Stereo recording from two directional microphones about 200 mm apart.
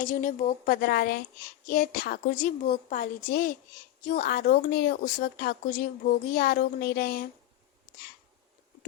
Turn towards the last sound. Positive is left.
turn(degrees=45)  # may be behind; listen again after turning